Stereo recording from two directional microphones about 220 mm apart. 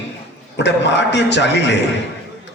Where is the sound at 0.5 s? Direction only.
50° left (ahead or behind).